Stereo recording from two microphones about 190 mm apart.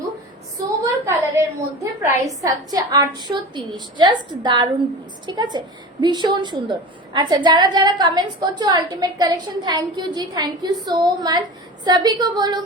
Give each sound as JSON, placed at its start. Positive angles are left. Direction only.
{"t": 1.1, "sound": "a woman's voice", "side_deg": -15}